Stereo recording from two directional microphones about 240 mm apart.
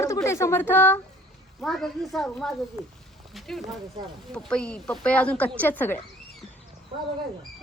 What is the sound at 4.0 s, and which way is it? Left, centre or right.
Speech, centre.